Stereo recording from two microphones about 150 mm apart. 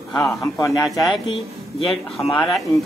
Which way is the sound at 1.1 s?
35° left (ahead or behind).